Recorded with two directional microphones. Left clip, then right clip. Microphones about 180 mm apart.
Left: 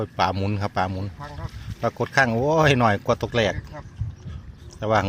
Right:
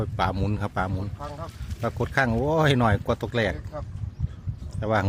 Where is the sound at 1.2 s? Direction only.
25° right (ahead or behind).